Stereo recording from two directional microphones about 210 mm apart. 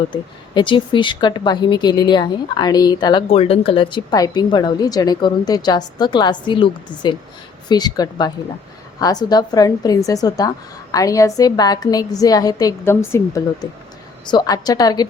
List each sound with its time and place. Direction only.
0.1 s a woman's voice: 20° left (ahead or behind)